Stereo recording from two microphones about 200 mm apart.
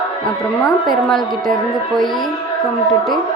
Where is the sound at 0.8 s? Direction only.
Centre (ahead or behind).